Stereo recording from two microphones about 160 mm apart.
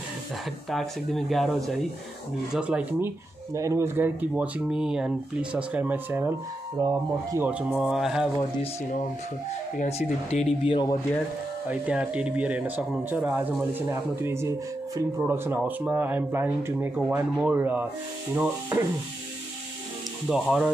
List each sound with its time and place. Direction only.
0.7 s speech: centre (ahead or behind); by 7.4 s 20° right (ahead or behind)
7.4 s speech: 10° right (ahead or behind)
9.8 s speech: 40° left (ahead or behind)
11.7 s speech: 10° right (ahead or behind)
20.2 s speech: 5° right (ahead or behind)